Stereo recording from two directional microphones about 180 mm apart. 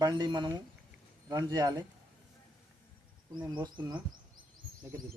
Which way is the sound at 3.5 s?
25° right (ahead or behind).